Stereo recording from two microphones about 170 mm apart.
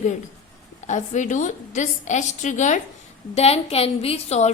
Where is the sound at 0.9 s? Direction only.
45° left (ahead or behind).